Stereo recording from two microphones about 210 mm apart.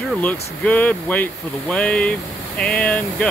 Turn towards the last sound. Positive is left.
turn(degrees=5)  # may be behind; listen again after turning